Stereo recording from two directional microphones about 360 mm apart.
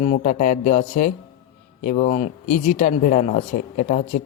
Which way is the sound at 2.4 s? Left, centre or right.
Left.